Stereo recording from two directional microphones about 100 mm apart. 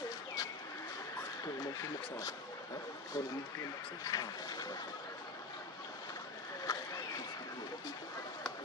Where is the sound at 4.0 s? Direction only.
40° left (ahead or behind).